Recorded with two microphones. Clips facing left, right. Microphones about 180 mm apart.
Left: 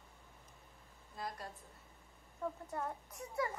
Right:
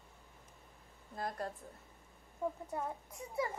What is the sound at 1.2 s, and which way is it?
Speech, 50° right (ahead or behind).